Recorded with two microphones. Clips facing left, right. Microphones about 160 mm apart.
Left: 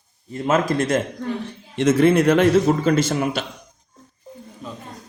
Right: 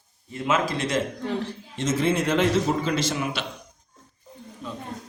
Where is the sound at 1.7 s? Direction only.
65° left (ahead or behind); by 3.4 s 45° left (ahead or behind).